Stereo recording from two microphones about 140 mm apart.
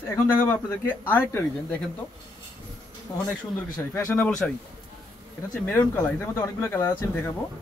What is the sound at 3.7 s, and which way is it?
Speech, 20° left (ahead or behind).